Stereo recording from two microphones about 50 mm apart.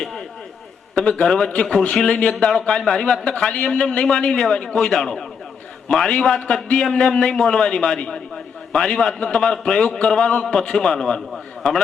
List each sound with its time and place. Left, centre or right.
0.0 s a sound: centre
1.0 s a man's voice: left
1.3 s a man's voice: centre
4.9 s a man's voice: centre